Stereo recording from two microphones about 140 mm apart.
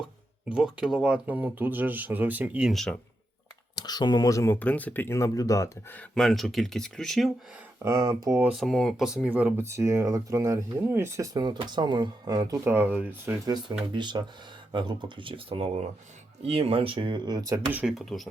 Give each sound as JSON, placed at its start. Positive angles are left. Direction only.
{"t": 0.4, "sound": "speech", "side_deg": -5}
{"t": 3.8, "sound": "speech", "side_deg": 30}
{"t": 4.6, "sound": "speech", "side_deg": 10}
{"t": 6.0, "sound": "speech", "side_deg": 5}
{"t": 7.8, "sound": "speech", "side_deg": -25}
{"t": 8.4, "sound": "speech", "side_deg": -5}
{"t": 13.4, "sound": "speech", "side_deg": -30}
{"t": 17.7, "sound": "speech", "side_deg": -10}
{"t": 17.9, "sound": "speech", "side_deg": 0}